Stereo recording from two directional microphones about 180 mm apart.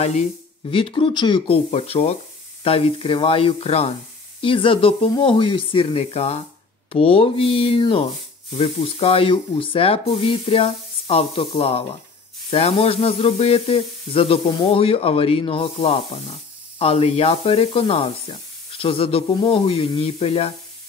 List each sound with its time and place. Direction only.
0.7 s speech: 30° left (ahead or behind)
2.6 s sizzle: 30° left (ahead or behind)